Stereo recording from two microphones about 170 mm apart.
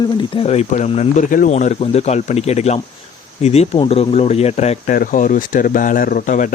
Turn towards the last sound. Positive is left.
turn(degrees=50)  # may be behind; listen again after turning